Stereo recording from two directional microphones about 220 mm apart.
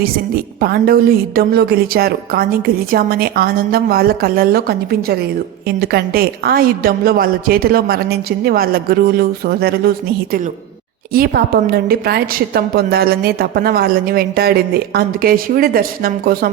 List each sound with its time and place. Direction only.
0.0 s a woman's voice: 45° right (ahead or behind)